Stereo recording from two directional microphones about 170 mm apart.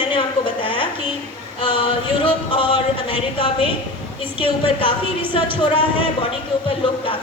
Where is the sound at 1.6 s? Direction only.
30° left (ahead or behind).